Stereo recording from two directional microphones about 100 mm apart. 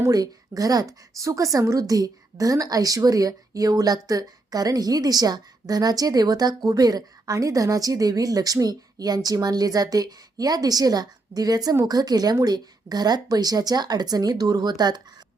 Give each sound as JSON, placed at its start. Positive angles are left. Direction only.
{"t": 0.0, "sound": "a woman's voice", "side_deg": -35}